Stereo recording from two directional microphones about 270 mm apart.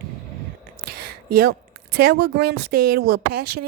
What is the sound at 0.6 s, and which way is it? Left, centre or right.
A woman's voice, right.